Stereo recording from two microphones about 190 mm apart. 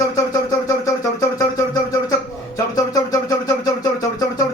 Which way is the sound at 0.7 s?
20° left (ahead or behind).